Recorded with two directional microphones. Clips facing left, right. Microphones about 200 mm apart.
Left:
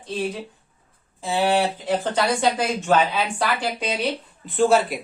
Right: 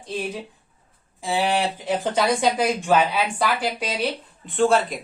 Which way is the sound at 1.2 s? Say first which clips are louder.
Left 2 dB; 15° right (ahead or behind).